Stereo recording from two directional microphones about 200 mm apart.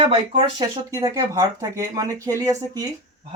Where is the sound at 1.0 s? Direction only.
15° right (ahead or behind).